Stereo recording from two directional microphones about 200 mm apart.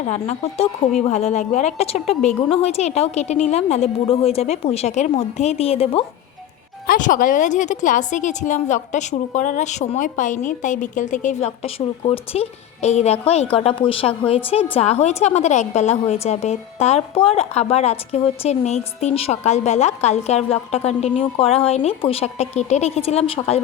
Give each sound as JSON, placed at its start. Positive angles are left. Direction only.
{"t": 0.1, "sound": "a woman's voice", "side_deg": 30}
{"t": 6.8, "sound": "a woman's voice", "side_deg": 40}